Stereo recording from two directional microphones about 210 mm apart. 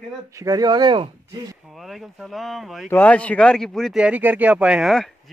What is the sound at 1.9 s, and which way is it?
Speech, centre (ahead or behind).